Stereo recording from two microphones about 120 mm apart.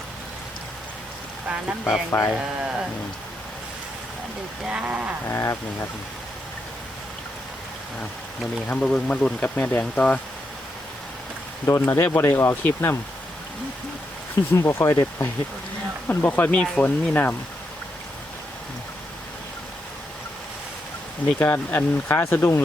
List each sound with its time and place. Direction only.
1.8 s speech: 20° left (ahead or behind)
2.3 s speech: 5° right (ahead or behind)
4.6 s speech: 10° right (ahead or behind)
5.3 s speech: 25° left (ahead or behind)
8.6 s speech: 10° left (ahead or behind)
11.6 s speech: 20° left (ahead or behind)
14.5 s speech: 25° left (ahead or behind)
21.2 s speech: 15° left (ahead or behind)